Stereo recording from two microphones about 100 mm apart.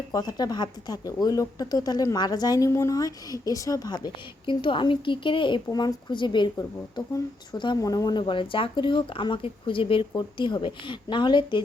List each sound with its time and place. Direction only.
0.1 s speech: 40° left (ahead or behind)
6.6 s speech: 35° left (ahead or behind)
8.2 s speech: 60° left (ahead or behind)
10.2 s speech: 50° left (ahead or behind)